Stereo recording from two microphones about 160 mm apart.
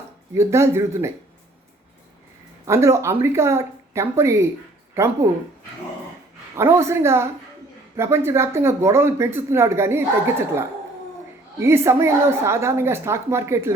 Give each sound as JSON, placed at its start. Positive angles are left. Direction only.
{"t": 0.3, "sound": "a woman's voice", "side_deg": -15}
{"t": 2.6, "sound": "a woman's voice", "side_deg": -15}
{"t": 6.6, "sound": "a woman's voice", "side_deg": -15}
{"t": 11.6, "sound": "a woman's voice", "side_deg": -15}